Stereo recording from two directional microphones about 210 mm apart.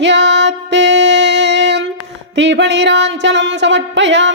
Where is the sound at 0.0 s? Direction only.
55° right (ahead or behind).